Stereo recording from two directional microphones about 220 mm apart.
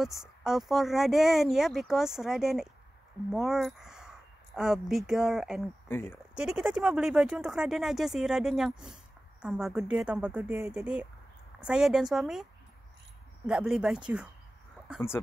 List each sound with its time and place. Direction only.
0.0 s speech: centre (ahead or behind)
5.9 s speech: 10° left (ahead or behind)
6.3 s speech: 5° right (ahead or behind)
13.5 s speech: 5° right (ahead or behind)